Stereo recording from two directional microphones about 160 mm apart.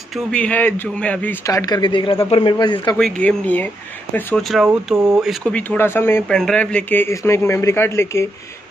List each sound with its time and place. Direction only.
0.3 s speech: 10° left (ahead or behind)
1.4 s speech: 20° left (ahead or behind)
3.0 s speech: 5° left (ahead or behind)
5.5 s speech: 10° left (ahead or behind)